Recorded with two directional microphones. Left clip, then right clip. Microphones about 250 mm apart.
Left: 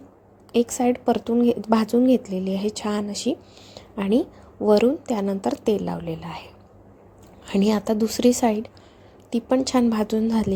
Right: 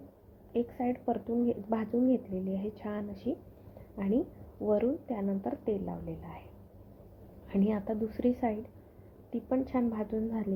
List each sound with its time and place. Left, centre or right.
0.5 s a woman's voice: left
7.4 s a woman's voice: left